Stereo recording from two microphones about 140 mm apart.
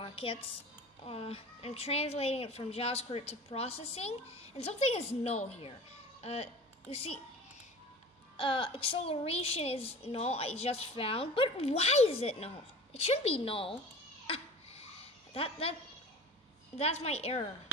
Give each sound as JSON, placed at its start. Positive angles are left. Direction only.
{"t": 0.0, "sound": "a woman's voice", "side_deg": 40}
{"t": 8.4, "sound": "a woman's voice", "side_deg": 40}
{"t": 14.2, "sound": "a sound", "side_deg": 45}
{"t": 15.3, "sound": "a woman's voice", "side_deg": 45}
{"t": 16.7, "sound": "a woman's voice", "side_deg": 50}